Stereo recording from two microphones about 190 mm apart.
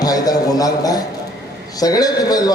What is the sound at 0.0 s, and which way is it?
A man's voice, 20° left (ahead or behind).